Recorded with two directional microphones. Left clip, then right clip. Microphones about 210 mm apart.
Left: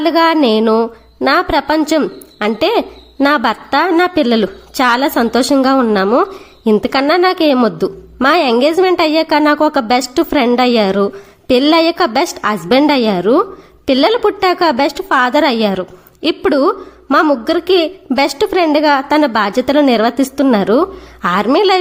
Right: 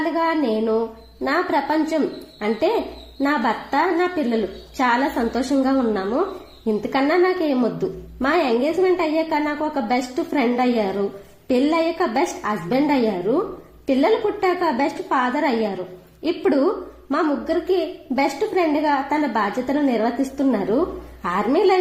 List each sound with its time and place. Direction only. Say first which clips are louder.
0.0 s a woman's voice: left 10 dB; 30° left (ahead or behind)
14.0 s a woman's voice: left 7 dB; 35° left (ahead or behind)